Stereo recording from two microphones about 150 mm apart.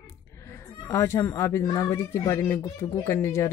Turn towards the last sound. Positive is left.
turn(degrees=20)  # may be behind; listen again after turning